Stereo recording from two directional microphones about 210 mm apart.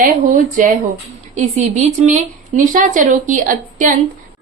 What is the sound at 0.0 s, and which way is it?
Speech, 40° right (ahead or behind).